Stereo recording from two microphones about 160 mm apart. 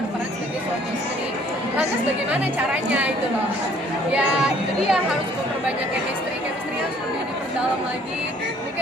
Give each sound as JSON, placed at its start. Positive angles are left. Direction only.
{"t": 4.1, "sound": "speech", "side_deg": -5}